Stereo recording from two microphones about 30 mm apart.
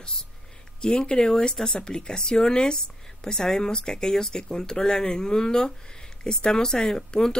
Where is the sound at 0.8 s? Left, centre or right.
Left.